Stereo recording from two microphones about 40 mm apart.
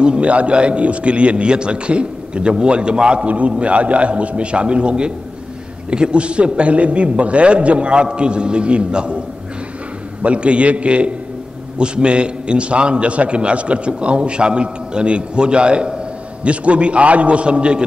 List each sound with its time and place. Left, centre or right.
0.0 s a man's voice: right
3.3 s a man's voice: right
10.2 s a man's voice: right